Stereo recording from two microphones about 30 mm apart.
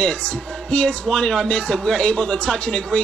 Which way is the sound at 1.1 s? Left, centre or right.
Left.